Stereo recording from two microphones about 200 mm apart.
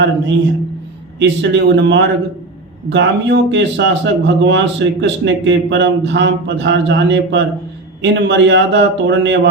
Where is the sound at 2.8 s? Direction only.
65° right (ahead or behind).